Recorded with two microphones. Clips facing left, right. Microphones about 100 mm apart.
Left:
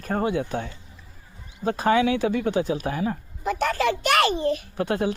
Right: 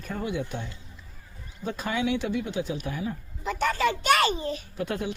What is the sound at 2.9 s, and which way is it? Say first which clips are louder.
A child's voice: left 6 dB; 60° left (ahead or behind).